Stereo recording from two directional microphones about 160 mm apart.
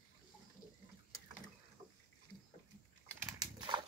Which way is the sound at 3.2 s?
25° right (ahead or behind).